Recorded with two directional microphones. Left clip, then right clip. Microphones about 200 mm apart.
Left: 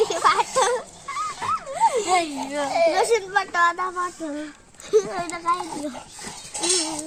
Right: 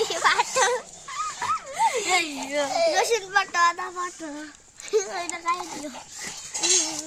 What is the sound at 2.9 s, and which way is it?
Speech, 15° right (ahead or behind).